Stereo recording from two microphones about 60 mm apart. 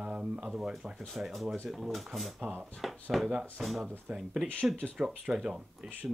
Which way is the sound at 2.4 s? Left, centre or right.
Right.